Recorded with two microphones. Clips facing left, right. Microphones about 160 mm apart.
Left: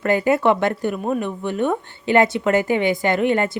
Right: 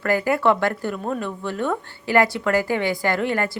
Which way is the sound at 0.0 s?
20° left (ahead or behind).